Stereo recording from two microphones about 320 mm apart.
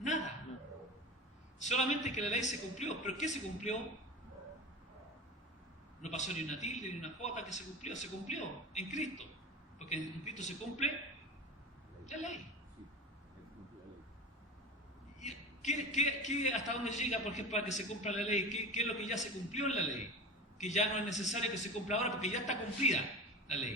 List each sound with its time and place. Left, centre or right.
1.6 s a man's voice: left
6.0 s a man's voice: left
12.0 s a man's voice: left
15.2 s a man's voice: left